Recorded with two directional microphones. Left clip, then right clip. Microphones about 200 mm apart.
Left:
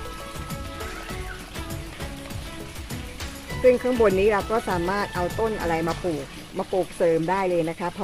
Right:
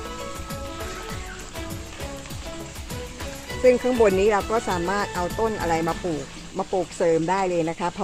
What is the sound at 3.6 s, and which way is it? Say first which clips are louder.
Speech: right 1 dB; 20° right (ahead or behind).